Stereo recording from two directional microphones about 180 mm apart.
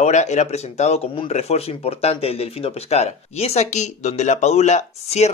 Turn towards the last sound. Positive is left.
turn(degrees=40)  # may be behind; listen again after turning